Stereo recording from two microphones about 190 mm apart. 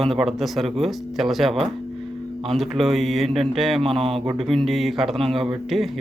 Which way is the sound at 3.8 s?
30° right (ahead or behind).